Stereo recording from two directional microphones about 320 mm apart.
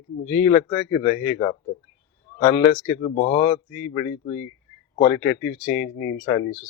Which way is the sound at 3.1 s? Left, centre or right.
Left.